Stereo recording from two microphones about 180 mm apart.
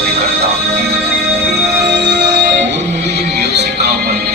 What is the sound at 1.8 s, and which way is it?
Music, 70° right (ahead or behind).